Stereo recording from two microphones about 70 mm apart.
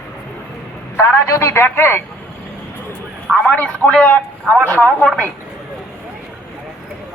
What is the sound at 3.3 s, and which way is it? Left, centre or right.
Speech, left.